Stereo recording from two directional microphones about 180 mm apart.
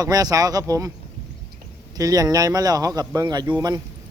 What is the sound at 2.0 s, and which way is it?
A man's voice, 20° right (ahead or behind).